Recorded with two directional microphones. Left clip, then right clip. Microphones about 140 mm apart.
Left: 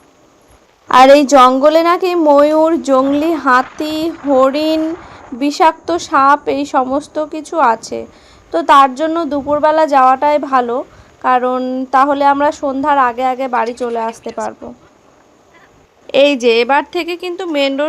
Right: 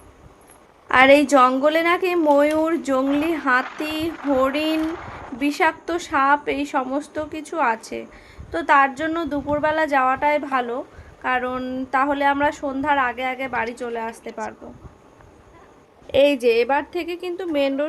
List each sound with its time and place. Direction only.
0.9 s speech: 25° left (ahead or behind)
3.6 s a woman's voice: centre (ahead or behind)
4.4 s speech: 20° left (ahead or behind)
4.8 s a sound: centre (ahead or behind)
5.4 s speech: 20° left (ahead or behind)
14.0 s a woman's voice: 5° left (ahead or behind)
16.0 s speech: 30° left (ahead or behind)